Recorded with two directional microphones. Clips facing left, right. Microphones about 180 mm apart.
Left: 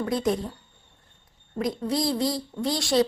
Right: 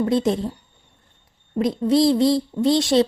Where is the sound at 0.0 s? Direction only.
25° right (ahead or behind).